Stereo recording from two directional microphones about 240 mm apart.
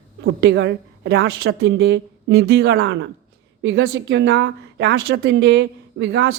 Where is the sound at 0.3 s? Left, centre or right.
Right.